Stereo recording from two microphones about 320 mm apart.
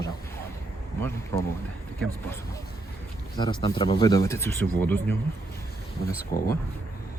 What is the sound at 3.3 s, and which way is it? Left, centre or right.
Speech, centre.